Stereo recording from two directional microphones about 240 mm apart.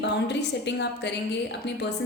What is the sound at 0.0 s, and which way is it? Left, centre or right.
A woman's voice, left.